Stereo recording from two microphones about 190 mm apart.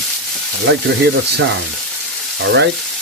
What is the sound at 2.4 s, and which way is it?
Speech, 60° right (ahead or behind).